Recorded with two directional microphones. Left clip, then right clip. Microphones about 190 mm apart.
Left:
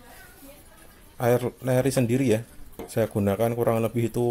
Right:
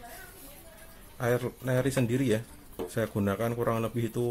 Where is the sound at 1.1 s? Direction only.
20° left (ahead or behind).